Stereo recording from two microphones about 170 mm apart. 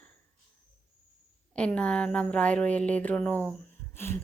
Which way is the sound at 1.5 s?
5° left (ahead or behind).